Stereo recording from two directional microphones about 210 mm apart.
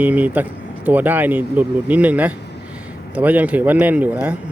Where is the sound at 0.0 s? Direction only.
5° right (ahead or behind).